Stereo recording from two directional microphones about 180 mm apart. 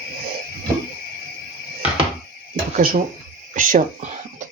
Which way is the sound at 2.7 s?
50° right (ahead or behind).